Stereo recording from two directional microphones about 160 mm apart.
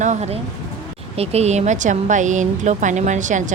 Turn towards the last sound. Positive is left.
turn(degrees=-50)  # may be behind; listen again after turning